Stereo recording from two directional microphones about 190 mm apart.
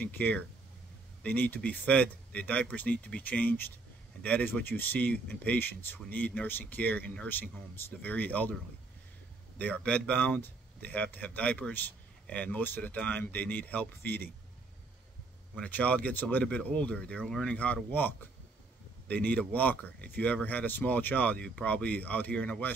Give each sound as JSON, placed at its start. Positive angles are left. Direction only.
{"t": 0.0, "sound": "speech", "side_deg": 10}
{"t": 9.6, "sound": "speech", "side_deg": 5}
{"t": 15.5, "sound": "speech", "side_deg": 5}